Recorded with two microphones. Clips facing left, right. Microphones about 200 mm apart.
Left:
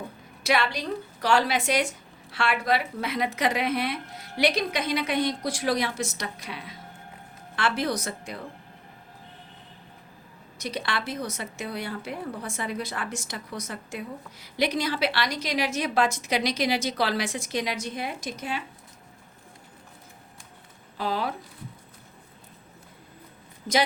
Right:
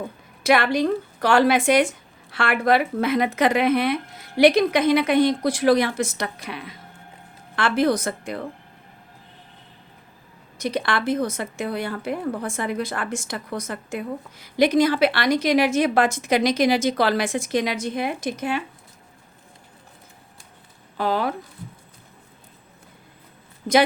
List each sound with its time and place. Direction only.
0.4 s a woman's voice: 55° right (ahead or behind)
10.6 s a woman's voice: 55° right (ahead or behind)
21.0 s a woman's voice: 55° right (ahead or behind)
23.7 s a woman's voice: 60° right (ahead or behind)